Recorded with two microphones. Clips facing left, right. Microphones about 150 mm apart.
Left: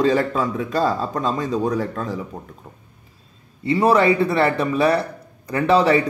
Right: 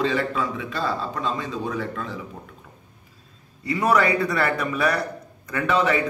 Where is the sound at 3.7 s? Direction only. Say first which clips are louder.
Left 5 dB; 30° left (ahead or behind).